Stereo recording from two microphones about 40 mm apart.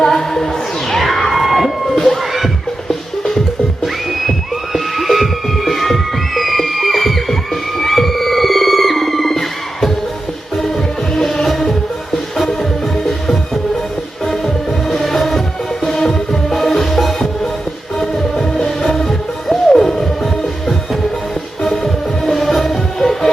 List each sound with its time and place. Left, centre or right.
0.0 s music: centre
1.3 s crowd: centre
4.3 s music: centre
11.4 s music: centre